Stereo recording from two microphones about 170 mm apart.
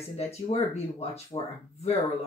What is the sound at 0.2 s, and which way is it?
Speech, 40° left (ahead or behind).